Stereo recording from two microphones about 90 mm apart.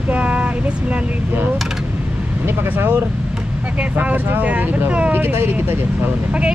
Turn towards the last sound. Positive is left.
turn(degrees=-25)  # may be behind; listen again after turning